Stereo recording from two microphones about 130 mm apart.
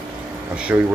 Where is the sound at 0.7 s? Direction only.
15° right (ahead or behind).